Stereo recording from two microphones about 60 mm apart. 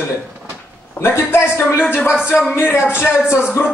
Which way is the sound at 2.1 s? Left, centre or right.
Centre.